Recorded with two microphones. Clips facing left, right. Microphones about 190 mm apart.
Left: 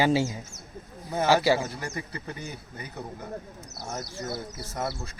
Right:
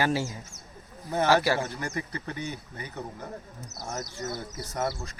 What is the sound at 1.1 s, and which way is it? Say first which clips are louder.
Speech: left 1 dB; centre (ahead or behind).